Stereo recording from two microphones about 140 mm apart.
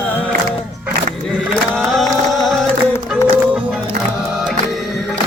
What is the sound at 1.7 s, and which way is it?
Music, centre (ahead or behind).